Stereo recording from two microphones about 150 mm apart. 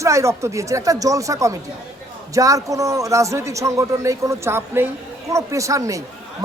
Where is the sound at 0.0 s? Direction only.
20° right (ahead or behind).